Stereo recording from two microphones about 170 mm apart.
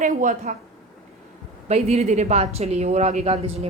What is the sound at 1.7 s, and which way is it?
A woman's voice, 40° right (ahead or behind).